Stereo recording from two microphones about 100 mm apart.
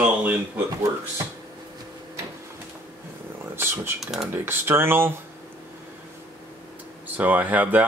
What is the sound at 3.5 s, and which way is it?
Speech, 25° right (ahead or behind).